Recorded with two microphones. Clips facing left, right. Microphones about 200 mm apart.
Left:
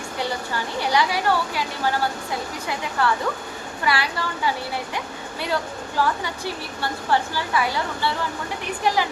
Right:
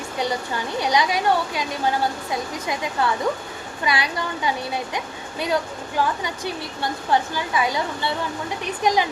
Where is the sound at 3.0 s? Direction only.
20° right (ahead or behind).